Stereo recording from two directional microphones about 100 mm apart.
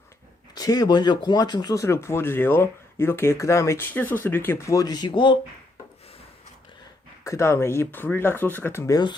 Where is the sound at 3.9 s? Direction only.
20° left (ahead or behind); by 5.3 s 50° left (ahead or behind).